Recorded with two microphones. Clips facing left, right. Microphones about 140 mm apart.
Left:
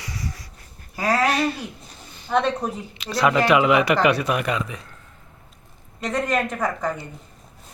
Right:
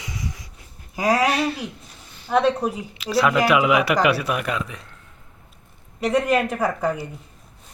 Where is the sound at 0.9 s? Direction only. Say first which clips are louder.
Right 1 dB; 15° right (ahead or behind).